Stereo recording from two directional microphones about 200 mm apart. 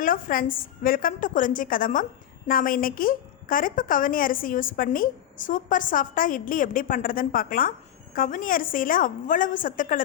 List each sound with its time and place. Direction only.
0.0 s a woman's voice: 45° left (ahead or behind)